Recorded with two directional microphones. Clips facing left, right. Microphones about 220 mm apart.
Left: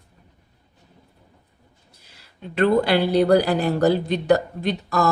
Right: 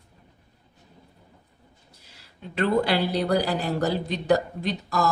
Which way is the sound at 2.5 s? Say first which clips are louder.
Left 5 dB; 60° left (ahead or behind).